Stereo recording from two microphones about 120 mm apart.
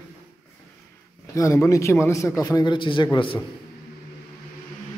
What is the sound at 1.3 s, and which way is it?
A man's voice, 25° left (ahead or behind).